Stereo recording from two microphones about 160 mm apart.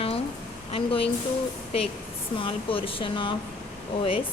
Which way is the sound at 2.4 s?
35° left (ahead or behind).